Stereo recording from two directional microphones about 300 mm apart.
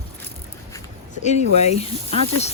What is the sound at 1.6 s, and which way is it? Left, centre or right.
Speech, left.